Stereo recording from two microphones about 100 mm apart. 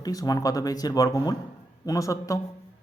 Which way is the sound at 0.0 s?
40° left (ahead or behind).